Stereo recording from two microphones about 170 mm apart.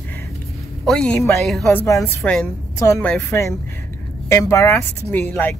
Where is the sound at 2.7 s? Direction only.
15° left (ahead or behind).